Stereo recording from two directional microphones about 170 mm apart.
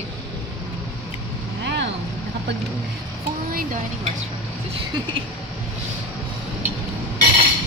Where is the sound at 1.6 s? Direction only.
90° right.